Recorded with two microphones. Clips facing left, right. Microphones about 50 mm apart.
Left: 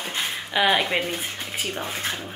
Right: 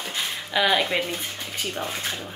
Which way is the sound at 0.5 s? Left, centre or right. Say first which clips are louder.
Left 1 dB; centre.